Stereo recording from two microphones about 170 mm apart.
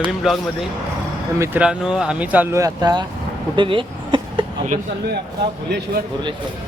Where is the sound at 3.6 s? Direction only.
30° right (ahead or behind).